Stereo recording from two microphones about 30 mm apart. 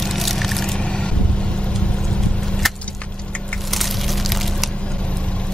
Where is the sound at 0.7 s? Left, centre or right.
Left.